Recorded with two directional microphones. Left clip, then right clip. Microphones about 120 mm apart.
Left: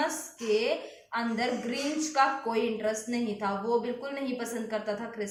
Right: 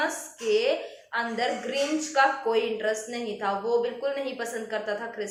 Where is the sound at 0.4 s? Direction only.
40° left (ahead or behind).